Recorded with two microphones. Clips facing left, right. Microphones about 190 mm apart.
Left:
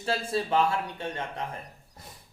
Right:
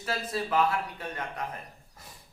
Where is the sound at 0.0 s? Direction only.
30° left (ahead or behind).